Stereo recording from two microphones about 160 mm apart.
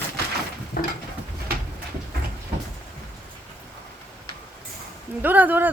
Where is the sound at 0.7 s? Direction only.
70° left (ahead or behind).